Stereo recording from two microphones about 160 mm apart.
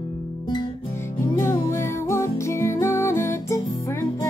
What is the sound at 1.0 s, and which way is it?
Music, 15° left (ahead or behind).